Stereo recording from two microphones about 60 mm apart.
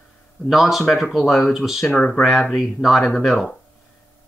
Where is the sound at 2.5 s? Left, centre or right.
Centre.